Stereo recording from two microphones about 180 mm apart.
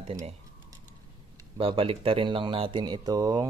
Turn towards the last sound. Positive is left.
turn(degrees=-20)  # may be behind; listen again after turning